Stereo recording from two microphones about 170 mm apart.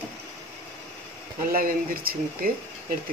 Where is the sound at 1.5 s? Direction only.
60° right (ahead or behind).